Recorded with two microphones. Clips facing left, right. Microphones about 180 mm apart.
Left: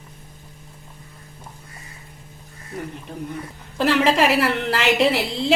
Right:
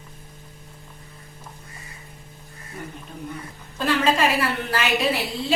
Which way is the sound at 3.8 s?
80° left.